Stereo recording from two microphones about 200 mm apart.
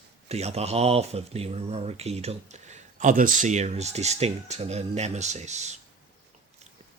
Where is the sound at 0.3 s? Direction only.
30° right (ahead or behind).